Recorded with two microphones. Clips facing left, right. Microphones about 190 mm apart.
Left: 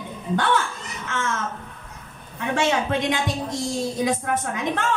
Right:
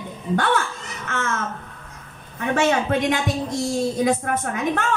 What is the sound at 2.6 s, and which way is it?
A woman's voice, 50° right (ahead or behind).